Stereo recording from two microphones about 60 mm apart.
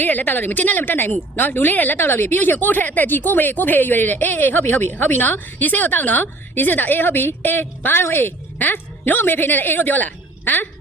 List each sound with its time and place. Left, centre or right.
0.0 s speech: left